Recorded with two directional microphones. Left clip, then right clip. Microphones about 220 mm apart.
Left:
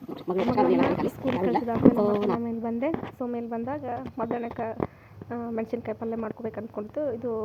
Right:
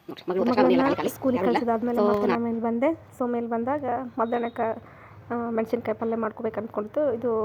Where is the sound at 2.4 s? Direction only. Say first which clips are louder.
Right 5 dB; 55° right (ahead or behind).